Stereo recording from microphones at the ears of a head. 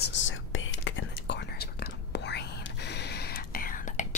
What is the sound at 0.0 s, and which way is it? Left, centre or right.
Whispering, left.